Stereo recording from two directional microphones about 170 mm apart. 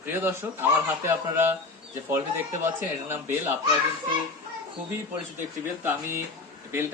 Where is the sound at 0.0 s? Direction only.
15° right (ahead or behind).